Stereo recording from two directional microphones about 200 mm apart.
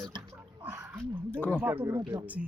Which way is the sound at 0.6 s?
10° right (ahead or behind).